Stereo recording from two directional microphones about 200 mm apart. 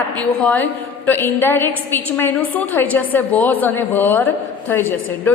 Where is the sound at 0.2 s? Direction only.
10° left (ahead or behind).